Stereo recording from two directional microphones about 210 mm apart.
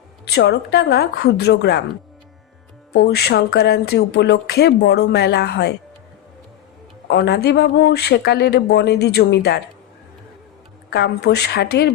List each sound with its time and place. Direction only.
0.3 s speech: 50° left (ahead or behind)
2.9 s speech: 50° left (ahead or behind)
7.1 s speech: 50° left (ahead or behind)
10.8 s speech: 50° left (ahead or behind)